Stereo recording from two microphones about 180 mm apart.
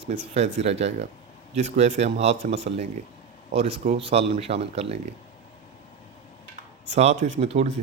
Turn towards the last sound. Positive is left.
turn(degrees=-35)  # may be behind; listen again after turning